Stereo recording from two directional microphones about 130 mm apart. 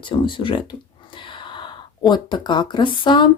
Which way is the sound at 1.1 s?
40° left (ahead or behind).